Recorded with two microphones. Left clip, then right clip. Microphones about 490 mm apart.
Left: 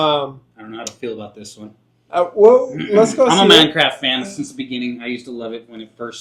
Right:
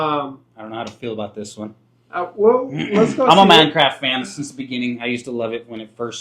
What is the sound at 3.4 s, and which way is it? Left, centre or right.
Speech, right.